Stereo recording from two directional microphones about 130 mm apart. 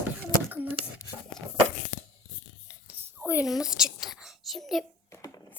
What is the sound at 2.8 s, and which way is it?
Whispering, 10° right (ahead or behind).